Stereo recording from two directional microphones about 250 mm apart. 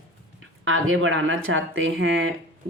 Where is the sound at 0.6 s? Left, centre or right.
Right.